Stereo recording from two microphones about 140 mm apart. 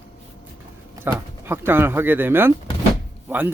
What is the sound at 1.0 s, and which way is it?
Speech, 15° right (ahead or behind).